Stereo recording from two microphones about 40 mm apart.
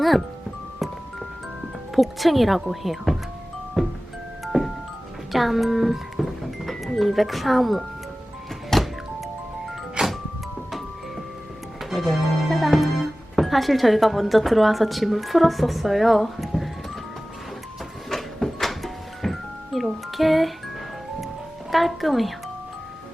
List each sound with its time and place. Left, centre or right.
1.9 s a woman's voice: centre
3.8 s music: centre
5.3 s speech: centre
8.7 s music: centre
10.0 s music: right
11.8 s a woman's voice: centre
18.1 s music: centre
20.1 s a woman's voice: centre
21.7 s a woman's voice: centre